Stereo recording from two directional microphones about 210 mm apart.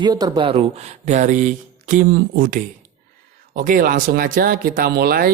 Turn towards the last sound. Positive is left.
turn(degrees=-45)  # may be behind; listen again after turning